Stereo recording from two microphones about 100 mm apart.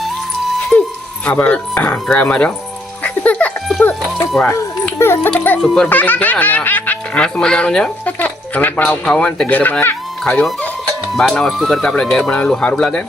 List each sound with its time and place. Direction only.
0.7 s music: 25° left (ahead or behind)
1.2 s speech: 10° left (ahead or behind)
3.0 s music: 15° left (ahead or behind)
4.9 s a child's voice: 25° left (ahead or behind)
5.5 s speech: 5° left (ahead or behind)
5.9 s speech: 15° left (ahead or behind)
10.2 s speech: 5° left (ahead or behind)